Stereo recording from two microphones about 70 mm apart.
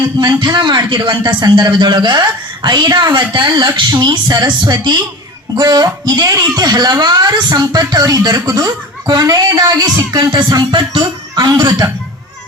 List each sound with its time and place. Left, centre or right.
0.2 s a woman's voice: right